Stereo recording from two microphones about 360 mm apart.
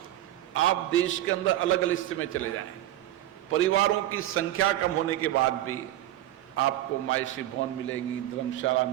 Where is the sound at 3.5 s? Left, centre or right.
Left.